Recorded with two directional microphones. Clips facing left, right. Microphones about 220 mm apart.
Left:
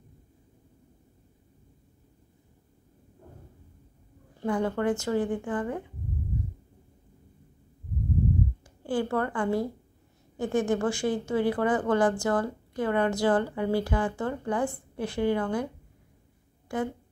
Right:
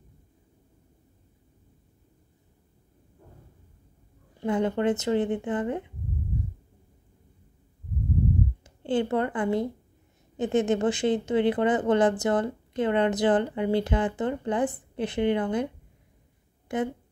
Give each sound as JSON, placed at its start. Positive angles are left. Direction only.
{"t": 4.4, "sound": "speech", "side_deg": -20}
{"t": 8.6, "sound": "speech", "side_deg": -20}